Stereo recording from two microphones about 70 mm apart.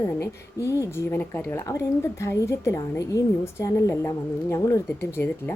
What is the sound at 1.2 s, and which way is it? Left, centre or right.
Speech, left.